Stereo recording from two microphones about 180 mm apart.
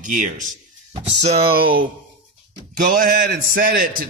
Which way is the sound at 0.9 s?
35° right (ahead or behind).